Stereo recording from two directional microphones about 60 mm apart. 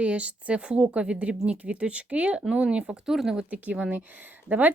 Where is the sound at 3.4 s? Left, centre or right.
Right.